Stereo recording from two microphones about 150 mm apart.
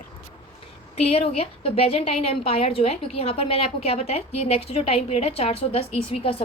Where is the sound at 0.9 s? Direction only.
40° left (ahead or behind).